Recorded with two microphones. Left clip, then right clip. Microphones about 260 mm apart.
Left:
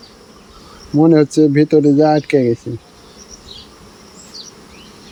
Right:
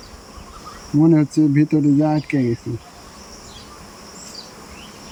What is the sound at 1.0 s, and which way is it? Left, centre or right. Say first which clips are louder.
Speech: left 5 dB; left.